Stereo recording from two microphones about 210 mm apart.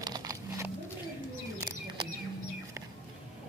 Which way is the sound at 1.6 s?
20° right (ahead or behind).